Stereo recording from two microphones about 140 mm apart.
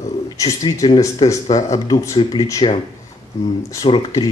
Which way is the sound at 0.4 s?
25° left (ahead or behind).